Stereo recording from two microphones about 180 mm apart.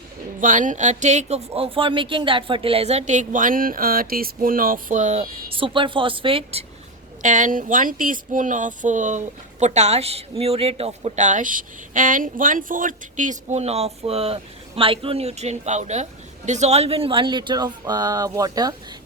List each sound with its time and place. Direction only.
0.3 s speech: 45° right (ahead or behind)
7.2 s speech: 45° right (ahead or behind); by 18.7 s 20° right (ahead or behind)